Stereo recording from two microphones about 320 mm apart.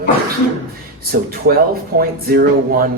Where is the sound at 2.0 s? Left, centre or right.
Right.